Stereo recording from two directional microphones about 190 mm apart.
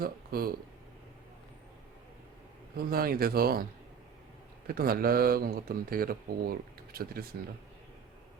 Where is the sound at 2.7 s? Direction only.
50° right (ahead or behind).